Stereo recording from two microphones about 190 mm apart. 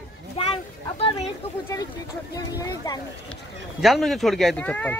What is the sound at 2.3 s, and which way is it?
Speech, 20° left (ahead or behind).